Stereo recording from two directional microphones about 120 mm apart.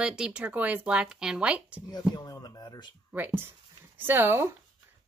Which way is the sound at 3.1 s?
15° right (ahead or behind).